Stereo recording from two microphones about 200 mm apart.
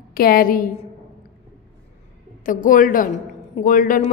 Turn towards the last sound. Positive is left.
turn(degrees=40)  # may be behind; listen again after turning